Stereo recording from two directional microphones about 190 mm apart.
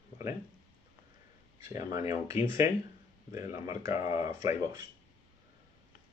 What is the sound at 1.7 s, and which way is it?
Speech, 15° right (ahead or behind).